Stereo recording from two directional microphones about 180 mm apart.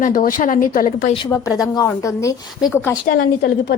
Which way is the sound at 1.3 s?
15° left (ahead or behind).